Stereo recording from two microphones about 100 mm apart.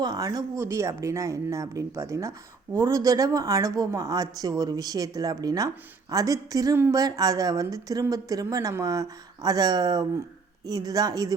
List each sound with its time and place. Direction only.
0.0 s a woman's voice: 40° right (ahead or behind)